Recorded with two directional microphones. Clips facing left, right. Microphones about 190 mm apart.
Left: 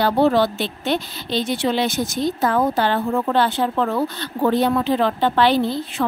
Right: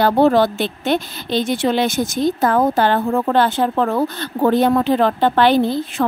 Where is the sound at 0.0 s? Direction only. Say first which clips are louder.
Right 3 dB; 45° right (ahead or behind).